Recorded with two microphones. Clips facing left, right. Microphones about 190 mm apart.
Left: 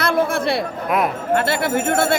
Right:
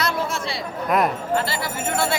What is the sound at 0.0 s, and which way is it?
Chatter, 55° left (ahead or behind).